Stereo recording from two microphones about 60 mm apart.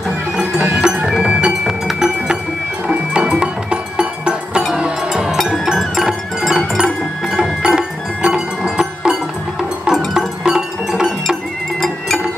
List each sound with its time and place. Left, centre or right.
0.7 s music: centre
5.1 s music: centre